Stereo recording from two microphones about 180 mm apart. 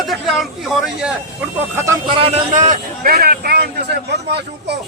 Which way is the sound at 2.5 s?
45° right (ahead or behind).